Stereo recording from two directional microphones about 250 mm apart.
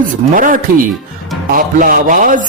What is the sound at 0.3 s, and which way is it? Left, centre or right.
Music, right.